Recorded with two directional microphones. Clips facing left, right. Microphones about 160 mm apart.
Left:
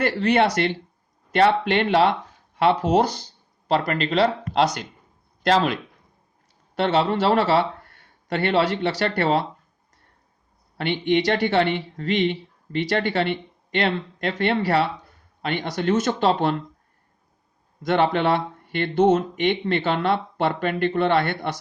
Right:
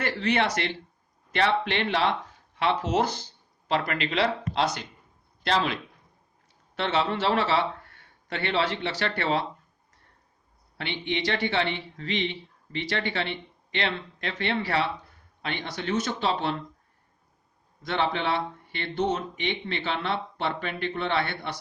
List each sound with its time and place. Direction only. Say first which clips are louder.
0.0 s speech: left 6 dB; 40° left (ahead or behind)
10.8 s speech: left 9 dB; 50° left (ahead or behind)
17.8 s speech: left 7 dB; 50° left (ahead or behind)